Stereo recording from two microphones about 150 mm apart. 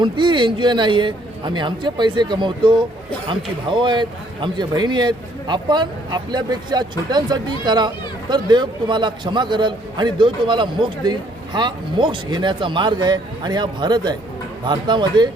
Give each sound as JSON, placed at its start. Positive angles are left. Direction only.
{"t": 0.0, "sound": "speech", "side_deg": -30}